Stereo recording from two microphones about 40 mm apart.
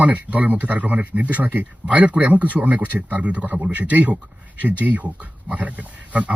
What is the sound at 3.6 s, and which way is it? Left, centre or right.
Speech, right.